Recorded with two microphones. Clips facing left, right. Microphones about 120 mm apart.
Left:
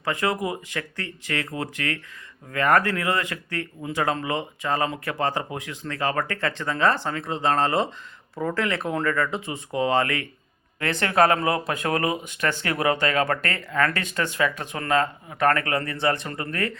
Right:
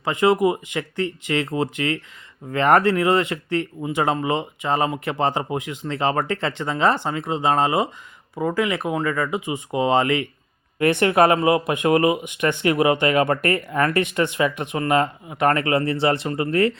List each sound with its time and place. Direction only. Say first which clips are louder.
0.0 s speech: right 7 dB; 20° right (ahead or behind)